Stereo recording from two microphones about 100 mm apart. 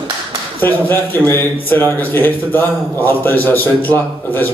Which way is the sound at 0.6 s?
20° left (ahead or behind).